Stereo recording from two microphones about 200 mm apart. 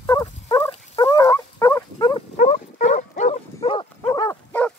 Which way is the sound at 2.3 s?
40° left (ahead or behind).